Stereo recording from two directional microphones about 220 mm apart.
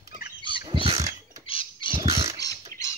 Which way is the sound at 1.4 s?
25° left (ahead or behind).